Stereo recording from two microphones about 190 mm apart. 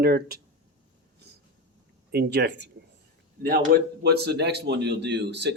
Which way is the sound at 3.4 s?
50° right (ahead or behind).